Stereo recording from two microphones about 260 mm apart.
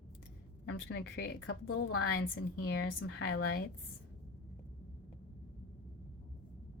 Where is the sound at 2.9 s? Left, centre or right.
Left.